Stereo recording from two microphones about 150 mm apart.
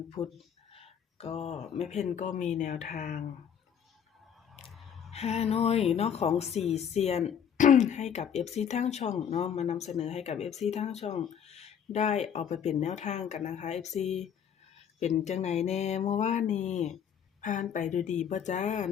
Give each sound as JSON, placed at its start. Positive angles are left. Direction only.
{"t": 0.2, "sound": "speech", "side_deg": 20}
{"t": 0.7, "sound": "speech", "side_deg": 40}
{"t": 4.6, "sound": "a sound", "side_deg": 0}
{"t": 5.1, "sound": "speech", "side_deg": 45}
{"t": 6.6, "sound": "speech", "side_deg": 0}
{"t": 6.9, "sound": "speech", "side_deg": 45}